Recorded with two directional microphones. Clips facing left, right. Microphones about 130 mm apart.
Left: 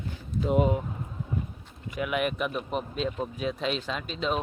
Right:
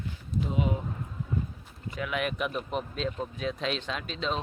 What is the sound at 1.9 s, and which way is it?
Speech, 10° left (ahead or behind).